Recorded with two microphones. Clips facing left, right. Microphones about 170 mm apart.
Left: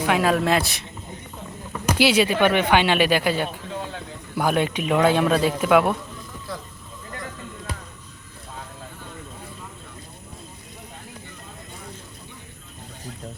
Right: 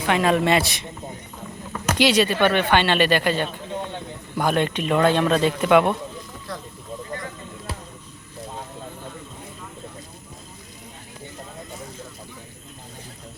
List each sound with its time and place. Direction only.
0.0 s a man's voice: 5° left (ahead or behind)